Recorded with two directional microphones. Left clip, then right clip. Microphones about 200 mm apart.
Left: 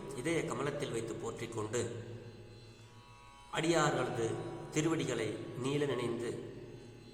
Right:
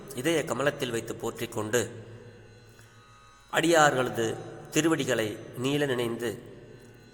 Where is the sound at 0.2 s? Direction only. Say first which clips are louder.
Right 9 dB; 40° right (ahead or behind).